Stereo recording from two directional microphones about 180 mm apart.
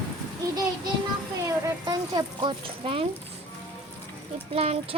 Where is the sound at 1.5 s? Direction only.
20° right (ahead or behind).